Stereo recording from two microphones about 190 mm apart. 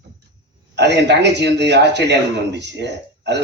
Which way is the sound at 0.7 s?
65° right (ahead or behind).